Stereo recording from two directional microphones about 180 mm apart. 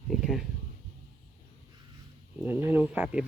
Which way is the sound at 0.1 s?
Centre (ahead or behind).